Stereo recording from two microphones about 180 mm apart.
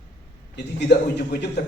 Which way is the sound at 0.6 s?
70° left (ahead or behind).